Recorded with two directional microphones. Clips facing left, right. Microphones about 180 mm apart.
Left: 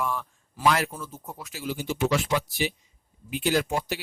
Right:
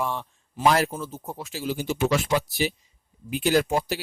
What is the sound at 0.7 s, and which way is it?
Speech, 35° right (ahead or behind).